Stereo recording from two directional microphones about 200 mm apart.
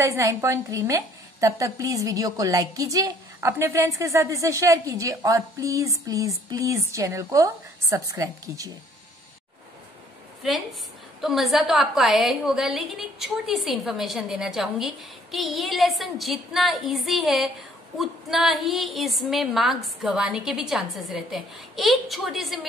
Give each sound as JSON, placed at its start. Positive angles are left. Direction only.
{"t": 0.0, "sound": "a woman's voice", "side_deg": -15}
{"t": 11.1, "sound": "a woman's voice", "side_deg": 0}